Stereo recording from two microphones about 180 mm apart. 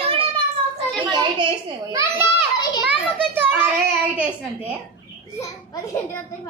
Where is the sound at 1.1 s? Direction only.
25° right (ahead or behind).